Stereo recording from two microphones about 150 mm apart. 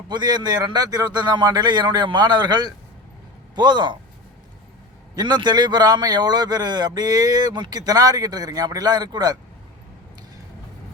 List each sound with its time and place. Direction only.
0.1 s a man's voice: 30° right (ahead or behind)
5.1 s a man's voice: 30° right (ahead or behind)